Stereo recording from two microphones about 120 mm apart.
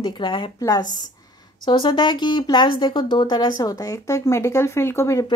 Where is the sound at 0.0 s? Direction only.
40° left (ahead or behind).